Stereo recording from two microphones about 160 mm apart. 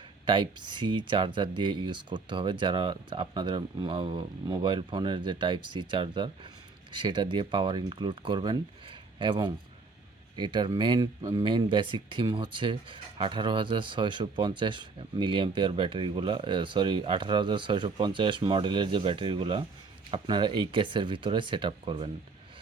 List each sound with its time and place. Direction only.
0.3 s speech: 30° right (ahead or behind)